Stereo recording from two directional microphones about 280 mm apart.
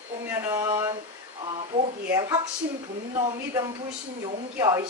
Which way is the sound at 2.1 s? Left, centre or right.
Centre.